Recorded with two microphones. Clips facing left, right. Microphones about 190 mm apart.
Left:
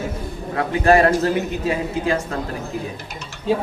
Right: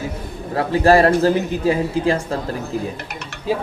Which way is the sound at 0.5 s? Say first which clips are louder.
Right 2 dB; 35° right (ahead or behind).